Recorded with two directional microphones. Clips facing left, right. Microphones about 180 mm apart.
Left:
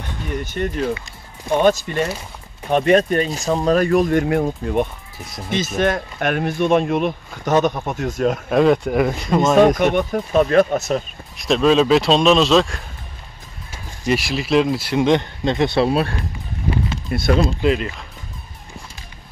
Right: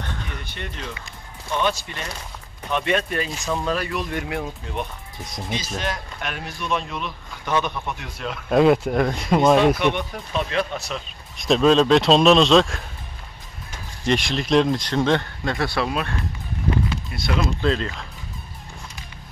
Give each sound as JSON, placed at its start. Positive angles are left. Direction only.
{"t": 0.4, "sound": "speech", "side_deg": 45}
{"t": 8.5, "sound": "speech", "side_deg": 0}
{"t": 9.8, "sound": "speech", "side_deg": 45}
{"t": 11.3, "sound": "speech", "side_deg": 0}
{"t": 15.9, "sound": "speech", "side_deg": 35}
{"t": 17.1, "sound": "speech", "side_deg": 50}
{"t": 17.6, "sound": "speech", "side_deg": 15}